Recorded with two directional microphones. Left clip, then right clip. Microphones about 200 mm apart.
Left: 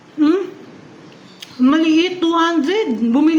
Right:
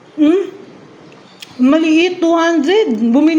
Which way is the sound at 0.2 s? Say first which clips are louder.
Right 3 dB; 5° right (ahead or behind).